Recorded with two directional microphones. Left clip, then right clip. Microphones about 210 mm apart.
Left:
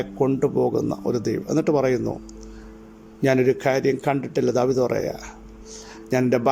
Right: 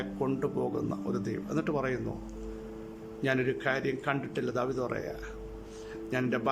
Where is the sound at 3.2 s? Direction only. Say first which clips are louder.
Left 10 dB; 25° left (ahead or behind).